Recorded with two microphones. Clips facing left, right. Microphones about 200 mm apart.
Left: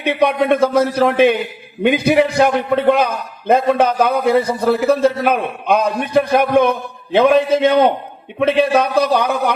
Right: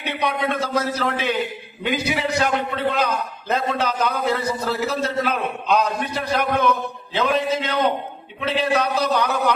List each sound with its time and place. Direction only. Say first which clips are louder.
0.0 s a man's voice: left 8 dB; 55° left (ahead or behind)